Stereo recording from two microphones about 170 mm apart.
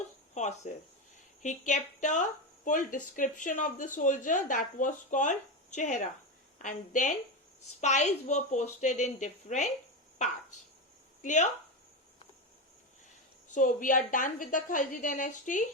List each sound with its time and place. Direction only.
0.3 s a sound: 45° left (ahead or behind)
1.4 s speech: 45° left (ahead or behind)
11.2 s speech: 45° left (ahead or behind)
13.5 s speech: 50° left (ahead or behind)